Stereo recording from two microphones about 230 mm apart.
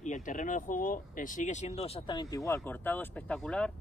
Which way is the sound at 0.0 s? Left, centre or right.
Left.